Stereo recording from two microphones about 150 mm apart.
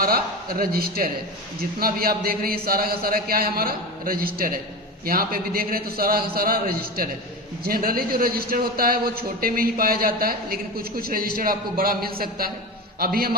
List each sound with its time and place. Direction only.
0.0 s a man's voice: 80° right